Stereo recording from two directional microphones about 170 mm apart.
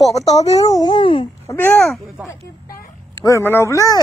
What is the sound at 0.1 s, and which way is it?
Speech, 40° left (ahead or behind).